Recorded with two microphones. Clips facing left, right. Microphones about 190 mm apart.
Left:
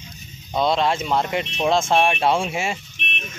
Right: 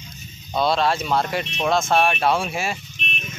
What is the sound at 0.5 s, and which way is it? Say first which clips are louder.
Speech: even; 20° left (ahead or behind).